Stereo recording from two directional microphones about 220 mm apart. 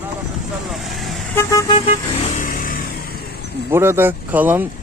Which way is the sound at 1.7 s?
30° left (ahead or behind).